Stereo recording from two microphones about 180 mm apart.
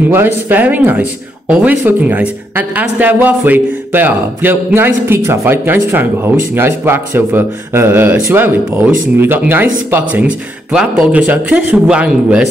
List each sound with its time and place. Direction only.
0.1 s a woman's voice: 10° right (ahead or behind)